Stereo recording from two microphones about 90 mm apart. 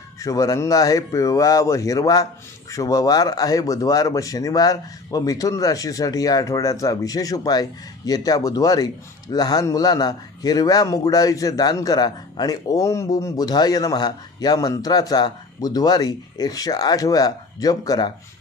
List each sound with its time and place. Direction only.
0.2 s speech: 40° left (ahead or behind)